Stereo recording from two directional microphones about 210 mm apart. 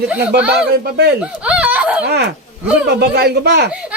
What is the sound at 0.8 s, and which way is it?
Speech, 50° right (ahead or behind).